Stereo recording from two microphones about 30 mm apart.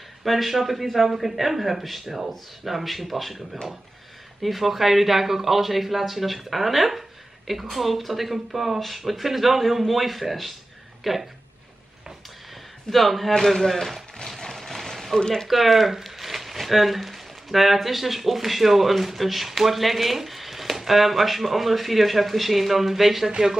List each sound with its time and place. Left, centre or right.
0.2 s speech: centre
12.9 s a man's voice: centre
14.2 s a sound: centre
15.1 s speech: left
15.4 s speech: centre